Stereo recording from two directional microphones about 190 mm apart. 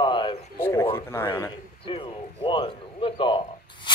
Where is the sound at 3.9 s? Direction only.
25° left (ahead or behind).